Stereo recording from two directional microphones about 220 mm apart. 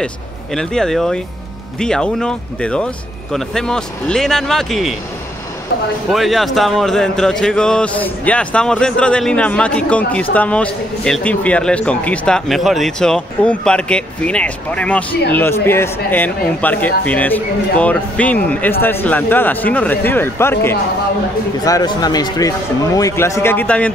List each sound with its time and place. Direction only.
0.6 s speech: 5° left (ahead or behind)
6.1 s speech: centre (ahead or behind)